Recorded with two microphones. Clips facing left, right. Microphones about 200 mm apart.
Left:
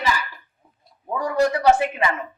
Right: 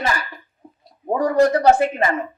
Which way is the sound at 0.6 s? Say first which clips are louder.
Right 13 dB; 55° right (ahead or behind).